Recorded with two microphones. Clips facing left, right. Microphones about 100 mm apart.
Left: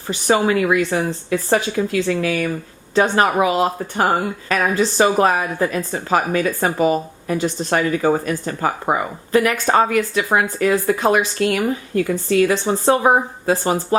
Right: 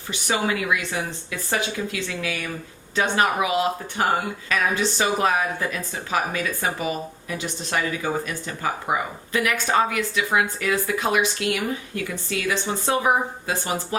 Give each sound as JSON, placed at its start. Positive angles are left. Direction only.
{"t": 0.1, "sound": "speech", "side_deg": 40}